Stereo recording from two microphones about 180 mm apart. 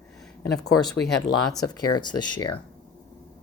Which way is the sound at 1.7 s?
20° left (ahead or behind).